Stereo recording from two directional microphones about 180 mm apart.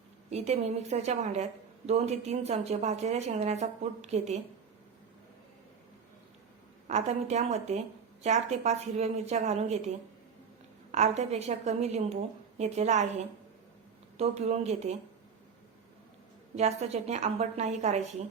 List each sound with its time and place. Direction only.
0.3 s speech: 35° right (ahead or behind)
6.8 s speech: 40° right (ahead or behind)
10.9 s speech: 40° right (ahead or behind)
14.2 s speech: 35° right (ahead or behind)
16.6 s speech: 40° right (ahead or behind)